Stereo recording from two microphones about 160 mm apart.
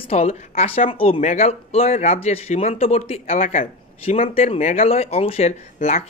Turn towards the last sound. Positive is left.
turn(degrees=40)  # may be behind; listen again after turning